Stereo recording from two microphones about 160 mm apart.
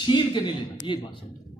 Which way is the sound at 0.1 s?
30° left (ahead or behind).